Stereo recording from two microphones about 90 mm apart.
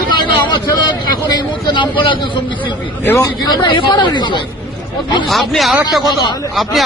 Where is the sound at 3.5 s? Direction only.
60° left (ahead or behind).